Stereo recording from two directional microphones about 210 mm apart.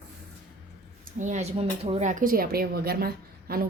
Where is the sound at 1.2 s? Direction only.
35° right (ahead or behind).